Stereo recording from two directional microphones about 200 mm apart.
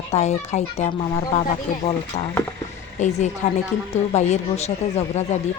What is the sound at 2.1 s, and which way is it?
A woman's voice, 35° left (ahead or behind).